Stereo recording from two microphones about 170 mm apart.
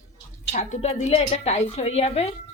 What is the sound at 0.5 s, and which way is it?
A woman's voice, 40° left (ahead or behind).